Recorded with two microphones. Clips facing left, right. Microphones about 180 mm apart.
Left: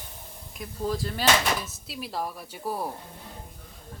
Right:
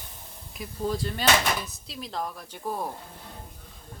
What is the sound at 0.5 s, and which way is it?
A woman's voice, centre (ahead or behind).